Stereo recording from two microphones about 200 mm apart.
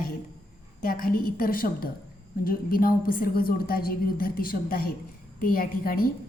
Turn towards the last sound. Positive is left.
turn(degrees=50)  # may be behind; listen again after turning